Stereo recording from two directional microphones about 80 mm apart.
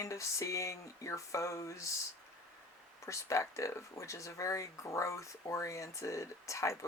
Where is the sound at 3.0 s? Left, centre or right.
Left.